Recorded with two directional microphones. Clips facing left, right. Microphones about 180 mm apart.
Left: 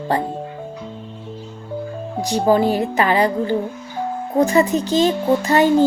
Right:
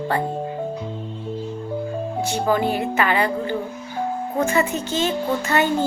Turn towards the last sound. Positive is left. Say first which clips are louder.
# left 5 dB
turn(degrees=35)  # may be behind; listen again after turning